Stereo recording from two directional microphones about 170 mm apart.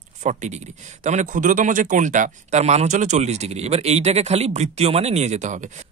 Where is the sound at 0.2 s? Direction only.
45° right (ahead or behind).